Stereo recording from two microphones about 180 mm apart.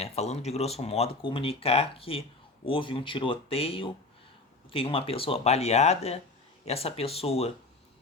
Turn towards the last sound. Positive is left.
turn(degrees=35)  # may be behind; listen again after turning